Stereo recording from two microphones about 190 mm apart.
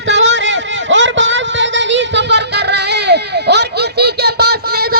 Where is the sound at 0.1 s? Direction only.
70° right (ahead or behind).